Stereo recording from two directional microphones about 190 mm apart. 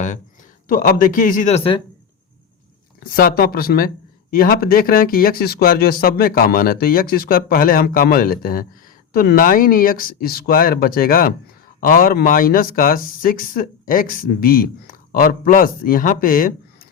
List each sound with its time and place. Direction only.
0.7 s speech: 45° left (ahead or behind); by 1.8 s 30° left (ahead or behind)
3.1 s speech: 50° left (ahead or behind)